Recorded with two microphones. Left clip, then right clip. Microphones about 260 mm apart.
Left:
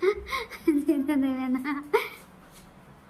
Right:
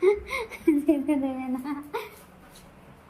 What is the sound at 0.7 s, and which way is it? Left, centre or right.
Speech, centre.